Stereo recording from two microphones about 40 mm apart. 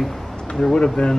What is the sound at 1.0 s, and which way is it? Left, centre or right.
Speech, left.